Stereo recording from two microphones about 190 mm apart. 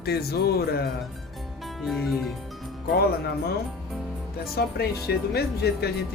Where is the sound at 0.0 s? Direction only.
55° left (ahead or behind).